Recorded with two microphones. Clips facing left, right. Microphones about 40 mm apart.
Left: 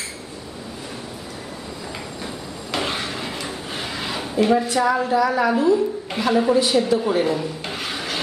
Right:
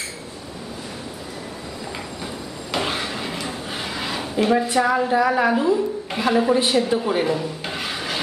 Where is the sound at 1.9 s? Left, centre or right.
Centre.